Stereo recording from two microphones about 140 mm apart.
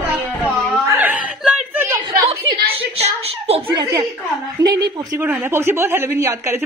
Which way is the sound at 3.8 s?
25° right (ahead or behind).